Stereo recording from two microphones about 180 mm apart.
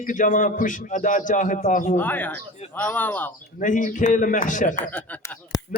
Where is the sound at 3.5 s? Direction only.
45° left (ahead or behind).